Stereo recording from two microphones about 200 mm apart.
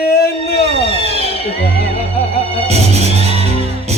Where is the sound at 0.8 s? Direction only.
30° left (ahead or behind).